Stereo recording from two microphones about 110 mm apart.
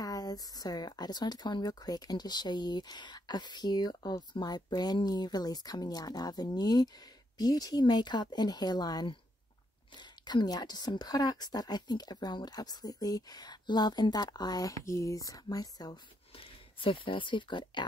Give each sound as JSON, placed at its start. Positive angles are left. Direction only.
{"t": 0.0, "sound": "speech", "side_deg": 35}
{"t": 16.3, "sound": "speech", "side_deg": 55}